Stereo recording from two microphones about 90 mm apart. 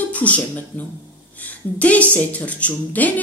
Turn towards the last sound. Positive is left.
turn(degrees=20)  # may be behind; listen again after turning